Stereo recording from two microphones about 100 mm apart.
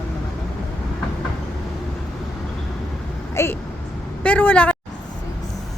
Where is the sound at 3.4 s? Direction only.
30° left (ahead or behind).